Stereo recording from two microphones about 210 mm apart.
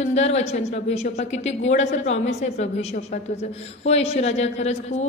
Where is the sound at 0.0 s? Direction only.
30° left (ahead or behind).